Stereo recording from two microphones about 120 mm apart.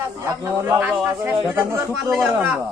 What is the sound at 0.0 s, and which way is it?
A man's voice, 25° right (ahead or behind).